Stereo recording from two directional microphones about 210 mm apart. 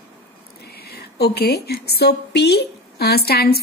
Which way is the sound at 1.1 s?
50° left (ahead or behind).